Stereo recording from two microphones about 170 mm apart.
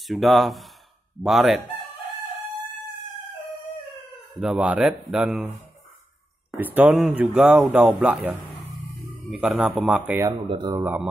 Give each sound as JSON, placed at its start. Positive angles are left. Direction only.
{"t": 0.0, "sound": "speech", "side_deg": 0}
{"t": 4.4, "sound": "speech", "side_deg": -5}
{"t": 6.5, "sound": "speech", "side_deg": -10}
{"t": 10.5, "sound": "speech", "side_deg": -25}
{"t": 10.8, "sound": "speech", "side_deg": -10}